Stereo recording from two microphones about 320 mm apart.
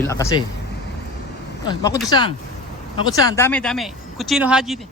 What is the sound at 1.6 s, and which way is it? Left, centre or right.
Speech, centre.